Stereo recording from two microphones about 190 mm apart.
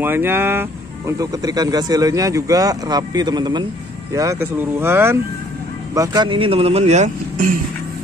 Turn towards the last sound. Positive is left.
turn(degrees=-35)  # may be behind; listen again after turning